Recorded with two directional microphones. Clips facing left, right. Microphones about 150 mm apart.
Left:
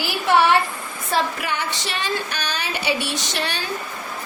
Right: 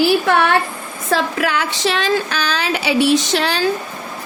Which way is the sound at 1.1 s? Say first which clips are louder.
Right 5 dB; 90° right.